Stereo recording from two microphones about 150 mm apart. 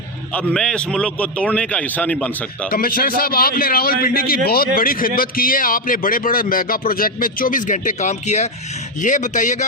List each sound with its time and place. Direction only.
0.3 s a man's voice: 5° left (ahead or behind)
2.6 s a man's voice: 75° left (ahead or behind)
4.4 s a man's voice: 90° left; by 9.6 s 55° left (ahead or behind)